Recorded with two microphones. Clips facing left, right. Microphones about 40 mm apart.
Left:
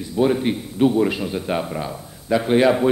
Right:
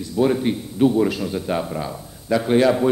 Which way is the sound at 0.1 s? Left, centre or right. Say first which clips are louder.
Even; centre.